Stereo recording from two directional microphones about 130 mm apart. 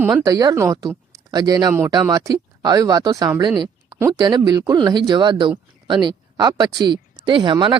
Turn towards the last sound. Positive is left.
turn(degrees=-35)  # may be behind; listen again after turning